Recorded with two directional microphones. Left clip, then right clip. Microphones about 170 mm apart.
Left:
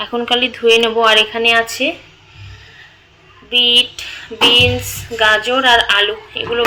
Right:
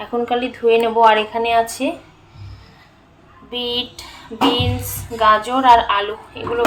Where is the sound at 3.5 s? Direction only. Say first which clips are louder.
Left 11 dB; 10° left (ahead or behind).